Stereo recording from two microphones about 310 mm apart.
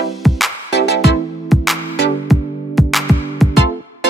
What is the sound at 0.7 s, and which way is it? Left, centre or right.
Music, left.